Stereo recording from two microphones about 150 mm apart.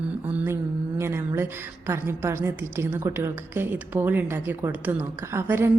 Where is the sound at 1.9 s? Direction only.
15° right (ahead or behind).